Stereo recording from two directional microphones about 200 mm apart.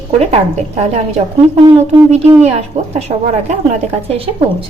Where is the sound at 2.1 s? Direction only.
35° right (ahead or behind).